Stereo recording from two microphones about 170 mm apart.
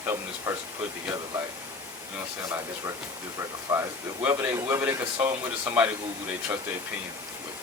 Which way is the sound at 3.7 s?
15° right (ahead or behind).